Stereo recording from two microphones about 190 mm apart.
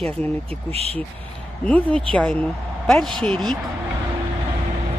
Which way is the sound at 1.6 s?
5° left (ahead or behind).